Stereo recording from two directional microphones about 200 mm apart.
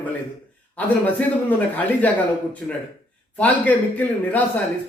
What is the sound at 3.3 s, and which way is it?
Speech, 5° left (ahead or behind).